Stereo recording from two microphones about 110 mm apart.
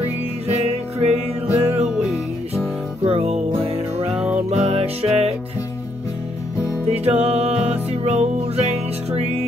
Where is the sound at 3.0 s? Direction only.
65° right (ahead or behind).